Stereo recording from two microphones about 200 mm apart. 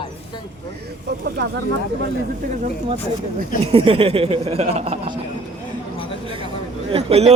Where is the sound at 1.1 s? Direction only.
55° right (ahead or behind).